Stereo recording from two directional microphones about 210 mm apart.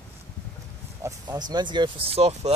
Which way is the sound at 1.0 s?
15° right (ahead or behind).